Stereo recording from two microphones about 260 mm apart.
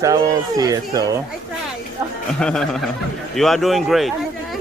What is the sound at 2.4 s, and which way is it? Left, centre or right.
A man's voice, centre.